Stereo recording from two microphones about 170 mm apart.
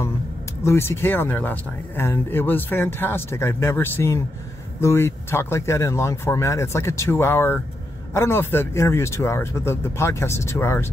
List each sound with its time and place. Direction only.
0.7 s speech: 15° left (ahead or behind)